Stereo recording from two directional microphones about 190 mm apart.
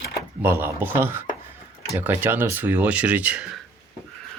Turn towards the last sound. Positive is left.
turn(degrees=-5)  # may be behind; listen again after turning